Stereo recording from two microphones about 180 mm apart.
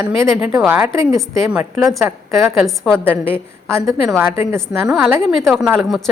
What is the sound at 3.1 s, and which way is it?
Speech, 10° right (ahead or behind).